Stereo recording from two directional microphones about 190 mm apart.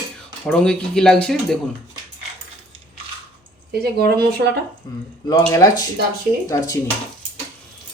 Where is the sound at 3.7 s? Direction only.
55° right (ahead or behind).